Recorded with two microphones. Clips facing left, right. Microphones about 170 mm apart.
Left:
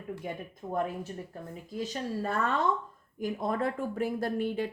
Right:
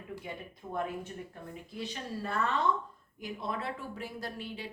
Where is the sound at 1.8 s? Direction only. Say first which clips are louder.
Left 5 dB; 45° left (ahead or behind).